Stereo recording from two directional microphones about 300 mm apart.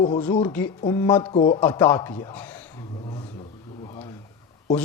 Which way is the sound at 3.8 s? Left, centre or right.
Centre.